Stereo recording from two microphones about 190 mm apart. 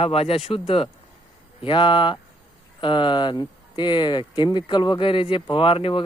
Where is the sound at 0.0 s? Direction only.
30° left (ahead or behind).